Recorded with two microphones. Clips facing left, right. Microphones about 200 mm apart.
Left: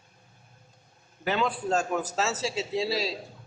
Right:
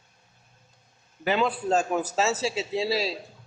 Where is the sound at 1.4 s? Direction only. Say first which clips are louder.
Right 2 dB; 5° right (ahead or behind).